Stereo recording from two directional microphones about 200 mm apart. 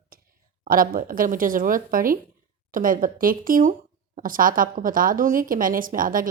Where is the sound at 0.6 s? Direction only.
45° right (ahead or behind).